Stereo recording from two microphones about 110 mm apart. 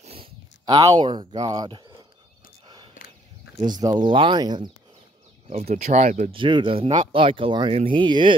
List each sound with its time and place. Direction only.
0.2 s a sound: 40° right (ahead or behind)
1.4 s speech: 35° right (ahead or behind)
3.6 s speech: 40° right (ahead or behind)
5.5 s speech: 75° right (ahead or behind)
6.3 s speech: 50° right (ahead or behind)